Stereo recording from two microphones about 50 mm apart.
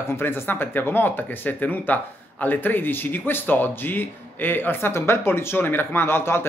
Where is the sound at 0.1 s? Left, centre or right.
Left.